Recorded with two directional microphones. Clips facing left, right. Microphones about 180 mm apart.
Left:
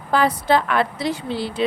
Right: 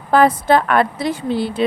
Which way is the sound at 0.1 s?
50° right (ahead or behind).